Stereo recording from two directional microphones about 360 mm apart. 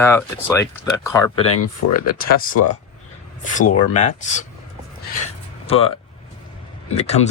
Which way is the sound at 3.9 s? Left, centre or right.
Centre.